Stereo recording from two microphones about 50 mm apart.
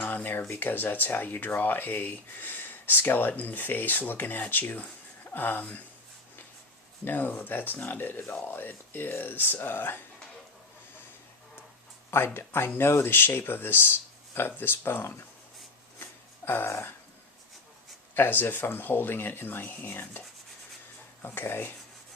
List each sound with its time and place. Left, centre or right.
0.0 s a sound: left
0.6 s speech: left
7.0 s speech: left
12.1 s speech: left
16.5 s speech: left
18.1 s speech: left